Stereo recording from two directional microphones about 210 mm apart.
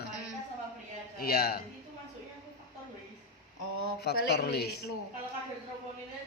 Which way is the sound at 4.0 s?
50° left (ahead or behind).